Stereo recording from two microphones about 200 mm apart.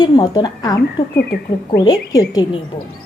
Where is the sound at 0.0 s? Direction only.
20° left (ahead or behind).